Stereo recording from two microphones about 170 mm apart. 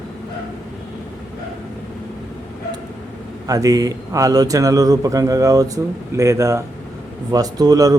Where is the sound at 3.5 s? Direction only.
20° right (ahead or behind).